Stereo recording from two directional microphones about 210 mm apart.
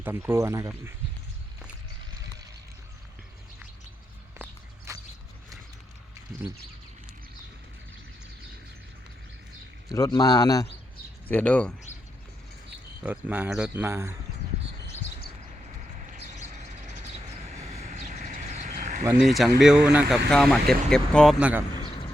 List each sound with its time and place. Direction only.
0.0 s speech: 10° right (ahead or behind)
4.9 s a sound: 15° right (ahead or behind)
9.9 s a man's voice: 15° left (ahead or behind)
13.0 s speech: 5° right (ahead or behind)
15.6 s vehicle: 35° right (ahead or behind)
19.1 s speech: centre (ahead or behind)
21.3 s speech: 5° right (ahead or behind)
21.8 s a sound: 25° left (ahead or behind)